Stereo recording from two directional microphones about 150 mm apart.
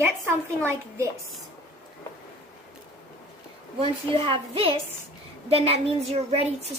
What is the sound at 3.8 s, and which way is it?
A woman's voice, 35° right (ahead or behind).